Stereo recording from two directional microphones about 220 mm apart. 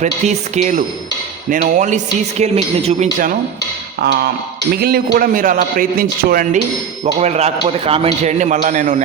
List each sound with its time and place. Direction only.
0.0 s a man's voice: 30° right (ahead or behind)
4.8 s a man's voice: 45° right (ahead or behind)